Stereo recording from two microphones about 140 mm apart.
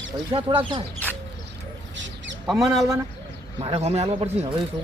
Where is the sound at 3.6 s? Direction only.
45° right (ahead or behind).